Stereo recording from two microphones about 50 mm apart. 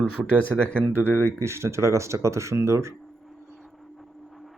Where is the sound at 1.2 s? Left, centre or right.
Right.